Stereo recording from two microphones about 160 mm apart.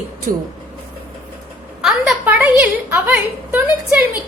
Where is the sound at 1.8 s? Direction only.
5° right (ahead or behind).